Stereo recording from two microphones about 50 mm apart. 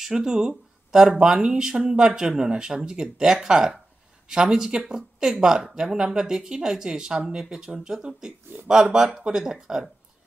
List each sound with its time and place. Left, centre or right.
0.0 s speech: centre
4.8 s a woman's voice: centre